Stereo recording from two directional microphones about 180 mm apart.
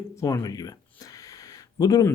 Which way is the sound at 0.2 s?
20° left (ahead or behind).